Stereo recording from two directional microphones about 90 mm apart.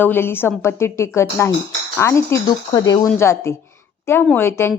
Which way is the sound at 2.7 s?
45° left (ahead or behind).